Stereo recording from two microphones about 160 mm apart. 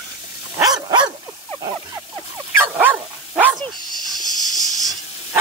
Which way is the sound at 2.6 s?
10° right (ahead or behind).